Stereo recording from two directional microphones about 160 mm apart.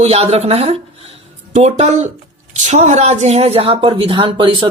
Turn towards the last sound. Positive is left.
turn(degrees=-30)  # may be behind; listen again after turning